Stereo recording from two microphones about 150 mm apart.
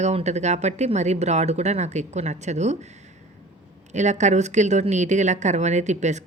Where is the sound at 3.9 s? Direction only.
50° right (ahead or behind).